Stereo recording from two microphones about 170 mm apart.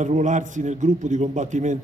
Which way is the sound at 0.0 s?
45° right (ahead or behind).